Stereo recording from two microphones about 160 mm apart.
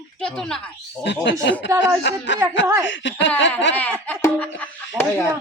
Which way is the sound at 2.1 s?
90° left.